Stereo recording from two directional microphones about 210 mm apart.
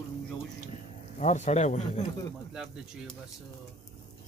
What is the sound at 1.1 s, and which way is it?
Speech, 35° left (ahead or behind).